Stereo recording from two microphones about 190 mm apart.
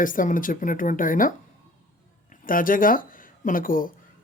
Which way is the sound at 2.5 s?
45° left (ahead or behind).